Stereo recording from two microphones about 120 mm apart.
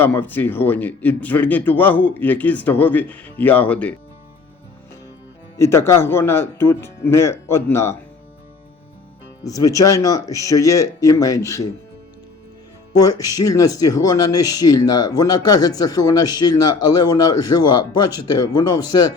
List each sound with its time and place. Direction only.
0.0 s speech: 15° left (ahead or behind)
5.5 s speech: 20° left (ahead or behind)
9.4 s speech: 30° left (ahead or behind)
12.9 s speech: 30° left (ahead or behind)